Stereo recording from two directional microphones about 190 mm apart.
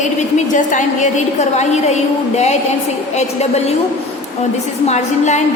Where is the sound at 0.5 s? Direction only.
40° left (ahead or behind).